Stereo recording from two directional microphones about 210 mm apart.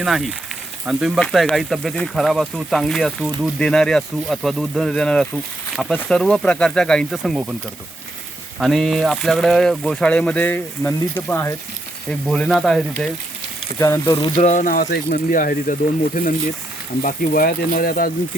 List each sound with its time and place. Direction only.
0.0 s speech: centre (ahead or behind)
8.5 s speech: centre (ahead or behind)
13.7 s speech: 15° left (ahead or behind)
14.2 s speech: 25° left (ahead or behind)
14.5 s speech: 40° left (ahead or behind)